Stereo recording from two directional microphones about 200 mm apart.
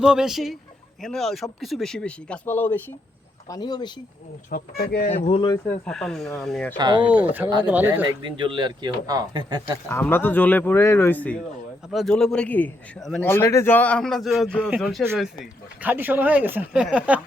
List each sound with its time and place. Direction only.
0.0 s a man's voice: 5° right (ahead or behind)
3.5 s speech: 20° left (ahead or behind)
4.5 s speech: 50° left (ahead or behind)
5.0 s speech: 30° left (ahead or behind)
5.5 s a man's voice: 5° left (ahead or behind)
6.7 s speech: 20° right (ahead or behind)
7.1 s speech: 10° right (ahead or behind)
8.5 s speech: 20° right (ahead or behind)
9.9 s a man's voice: 10° left (ahead or behind)
15.0 s speech: 10° right (ahead or behind)